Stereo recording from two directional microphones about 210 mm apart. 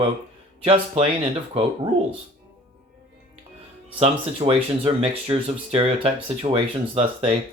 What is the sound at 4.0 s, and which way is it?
Speech, 30° right (ahead or behind).